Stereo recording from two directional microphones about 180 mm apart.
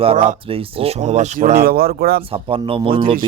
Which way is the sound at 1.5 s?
55° right (ahead or behind).